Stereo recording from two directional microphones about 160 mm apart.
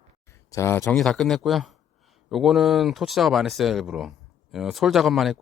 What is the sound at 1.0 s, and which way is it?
Speech, 5° left (ahead or behind).